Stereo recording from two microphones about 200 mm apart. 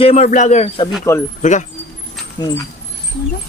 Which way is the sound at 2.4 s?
20° left (ahead or behind).